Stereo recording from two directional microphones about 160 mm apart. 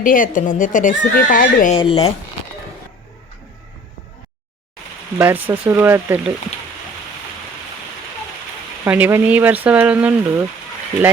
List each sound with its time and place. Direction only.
0.0 s speech: 60° left (ahead or behind)
1.7 s speech: 35° left (ahead or behind)
5.1 s speech: 10° right (ahead or behind)
8.8 s speech: 10° right (ahead or behind)